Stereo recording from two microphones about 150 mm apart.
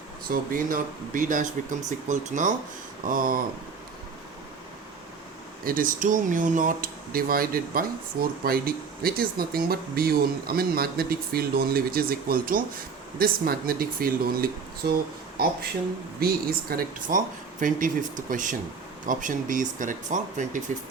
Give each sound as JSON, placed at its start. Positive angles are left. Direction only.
{"t": 0.3, "sound": "speech", "side_deg": -65}
{"t": 3.1, "sound": "speech", "side_deg": -70}
{"t": 5.6, "sound": "speech", "side_deg": -70}
{"t": 16.2, "sound": "speech", "side_deg": -80}